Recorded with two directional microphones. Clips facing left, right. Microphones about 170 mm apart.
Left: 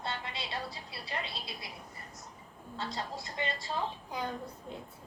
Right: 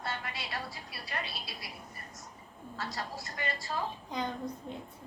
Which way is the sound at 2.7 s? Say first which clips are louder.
Left 1 dB; 20° left (ahead or behind).